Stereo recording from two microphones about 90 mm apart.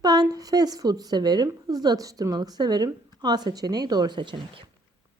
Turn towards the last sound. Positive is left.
turn(degrees=-60)  # may be behind; listen again after turning